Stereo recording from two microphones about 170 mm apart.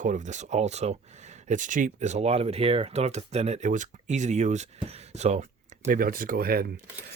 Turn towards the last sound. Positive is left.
turn(degrees=-60)  # may be behind; listen again after turning